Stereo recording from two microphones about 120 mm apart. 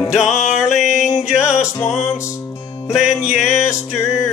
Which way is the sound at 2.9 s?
5° right (ahead or behind).